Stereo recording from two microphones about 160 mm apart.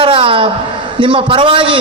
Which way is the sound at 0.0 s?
35° right (ahead or behind).